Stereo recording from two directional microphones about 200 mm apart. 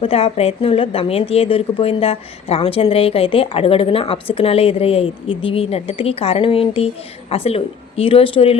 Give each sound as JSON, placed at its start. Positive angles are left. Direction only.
{"t": 0.0, "sound": "speech", "side_deg": 30}